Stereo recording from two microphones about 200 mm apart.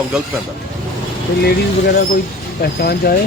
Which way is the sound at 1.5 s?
50° left (ahead or behind).